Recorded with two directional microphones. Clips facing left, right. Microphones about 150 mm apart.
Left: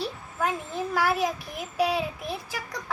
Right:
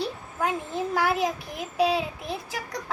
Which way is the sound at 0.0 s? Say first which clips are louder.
Right 1 dB; 15° right (ahead or behind).